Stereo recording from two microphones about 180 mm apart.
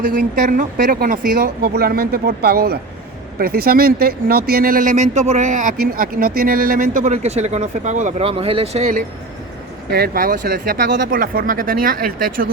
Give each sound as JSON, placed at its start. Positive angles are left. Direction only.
{"t": 0.0, "sound": "speech", "side_deg": -50}
{"t": 9.9, "sound": "speech", "side_deg": -55}